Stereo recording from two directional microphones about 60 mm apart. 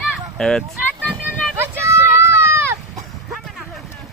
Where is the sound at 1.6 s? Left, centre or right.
Right.